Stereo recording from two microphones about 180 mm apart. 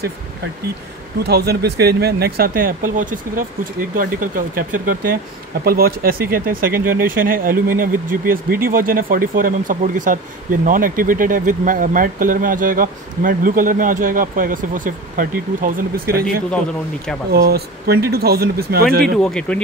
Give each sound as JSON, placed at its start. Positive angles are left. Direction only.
{"t": 1.2, "sound": "speech", "side_deg": -65}
{"t": 17.5, "sound": "speech", "side_deg": -60}
{"t": 19.1, "sound": "speech", "side_deg": 5}